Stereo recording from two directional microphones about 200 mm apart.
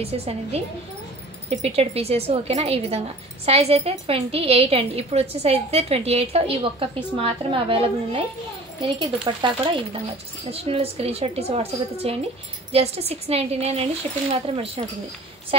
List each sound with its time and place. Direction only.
0.0 s a woman's voice: 30° right (ahead or behind)